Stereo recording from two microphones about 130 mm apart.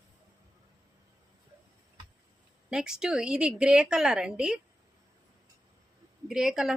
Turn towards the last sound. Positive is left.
turn(degrees=-5)  # may be behind; listen again after turning